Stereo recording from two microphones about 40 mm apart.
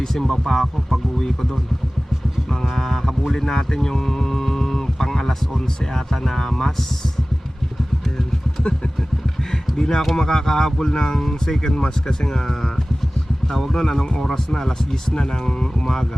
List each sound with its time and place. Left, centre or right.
0.0 s speech: centre
2.5 s speech: centre
9.5 s a sound: centre
10.2 s speech: centre
11.7 s speech: left